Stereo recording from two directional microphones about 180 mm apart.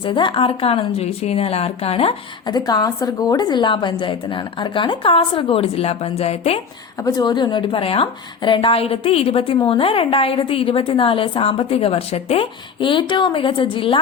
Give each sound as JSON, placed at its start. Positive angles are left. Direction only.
{"t": 0.0, "sound": "a woman's voice", "side_deg": 30}
{"t": 2.6, "sound": "a woman's voice", "side_deg": 20}
{"t": 7.0, "sound": "a woman's voice", "side_deg": 20}